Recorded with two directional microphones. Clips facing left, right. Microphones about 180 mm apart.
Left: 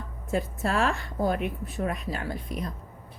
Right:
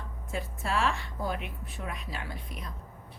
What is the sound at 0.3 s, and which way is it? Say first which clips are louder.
Speech: left 6 dB; 45° left (ahead or behind).